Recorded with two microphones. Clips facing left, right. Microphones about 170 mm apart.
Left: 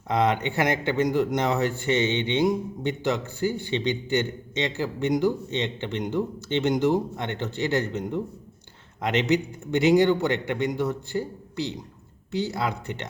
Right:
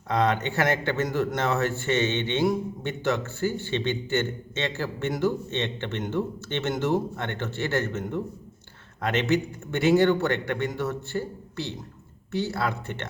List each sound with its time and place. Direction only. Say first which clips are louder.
0.1 s a man's voice: left 1 dB; 15° left (ahead or behind)